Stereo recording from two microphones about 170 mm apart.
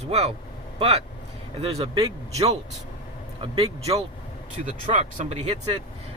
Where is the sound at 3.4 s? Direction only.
35° right (ahead or behind).